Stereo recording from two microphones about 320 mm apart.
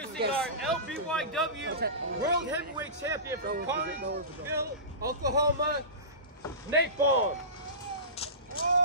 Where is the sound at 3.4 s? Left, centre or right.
Right.